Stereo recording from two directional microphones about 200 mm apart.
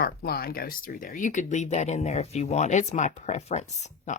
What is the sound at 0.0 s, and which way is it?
Speech, 50° left (ahead or behind).